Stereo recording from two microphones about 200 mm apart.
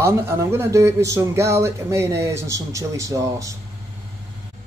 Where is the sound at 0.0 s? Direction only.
15° right (ahead or behind).